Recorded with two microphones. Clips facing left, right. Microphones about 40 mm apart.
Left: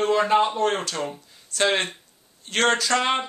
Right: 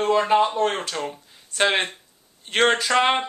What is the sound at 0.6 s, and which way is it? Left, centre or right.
Speech, centre.